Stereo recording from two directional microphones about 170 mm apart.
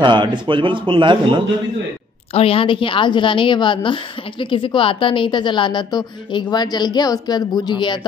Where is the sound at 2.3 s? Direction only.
35° left (ahead or behind).